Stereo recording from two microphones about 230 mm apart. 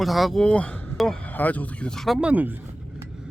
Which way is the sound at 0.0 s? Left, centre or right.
Centre.